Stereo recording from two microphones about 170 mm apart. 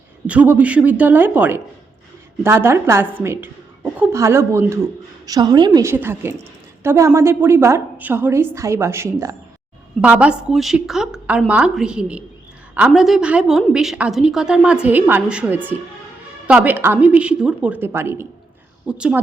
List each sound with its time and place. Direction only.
0.3 s a woman's voice: 10° right (ahead or behind)